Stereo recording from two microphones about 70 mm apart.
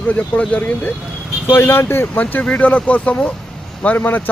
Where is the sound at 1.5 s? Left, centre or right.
Left.